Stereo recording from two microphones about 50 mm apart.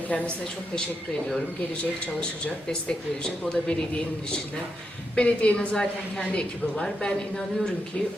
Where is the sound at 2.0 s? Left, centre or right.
Left.